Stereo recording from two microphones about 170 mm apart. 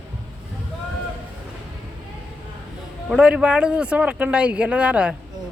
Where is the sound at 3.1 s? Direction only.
5° right (ahead or behind).